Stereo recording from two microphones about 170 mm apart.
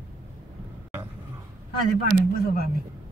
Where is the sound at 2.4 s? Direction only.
60° left (ahead or behind).